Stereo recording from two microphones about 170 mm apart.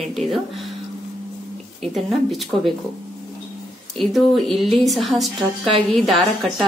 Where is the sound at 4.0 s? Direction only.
Centre (ahead or behind).